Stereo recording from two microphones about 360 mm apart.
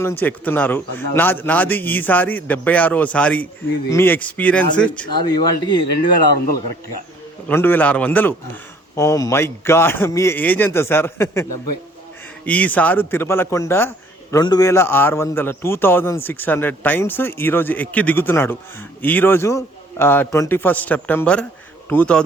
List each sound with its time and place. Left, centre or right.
0.0 s a man's voice: centre
5.8 s speech: left
7.4 s a man's voice: centre
12.5 s a man's voice: centre